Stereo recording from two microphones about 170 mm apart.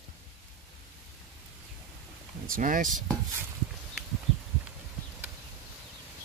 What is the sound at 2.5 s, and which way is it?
Speech, 50° right (ahead or behind).